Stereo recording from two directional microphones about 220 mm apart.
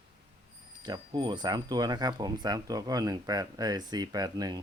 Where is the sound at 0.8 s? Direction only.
20° right (ahead or behind).